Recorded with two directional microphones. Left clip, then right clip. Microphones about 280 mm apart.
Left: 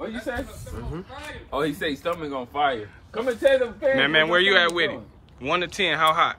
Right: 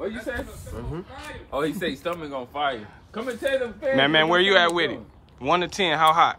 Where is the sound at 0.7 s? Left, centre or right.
Right.